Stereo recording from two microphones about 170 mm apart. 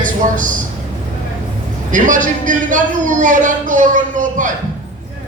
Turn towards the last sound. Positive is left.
turn(degrees=-50)  # may be behind; listen again after turning